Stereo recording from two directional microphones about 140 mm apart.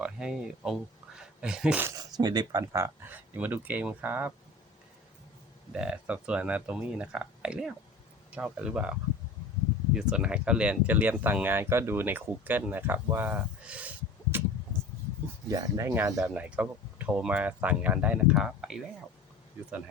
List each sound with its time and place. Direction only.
0.0 s speech: 5° right (ahead or behind)
1.9 s speech: 30° right (ahead or behind); by 4.3 s 15° right (ahead or behind)
5.7 s speech: 5° right (ahead or behind)
15.4 s speech: 20° right (ahead or behind); by 18.8 s 5° right (ahead or behind)